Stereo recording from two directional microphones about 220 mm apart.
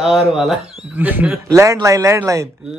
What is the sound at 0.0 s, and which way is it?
Speech, centre (ahead or behind).